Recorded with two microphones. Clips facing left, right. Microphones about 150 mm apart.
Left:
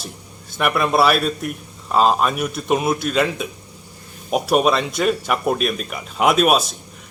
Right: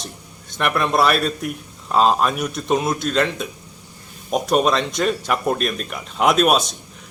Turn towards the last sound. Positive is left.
turn(degrees=5)  # may be behind; listen again after turning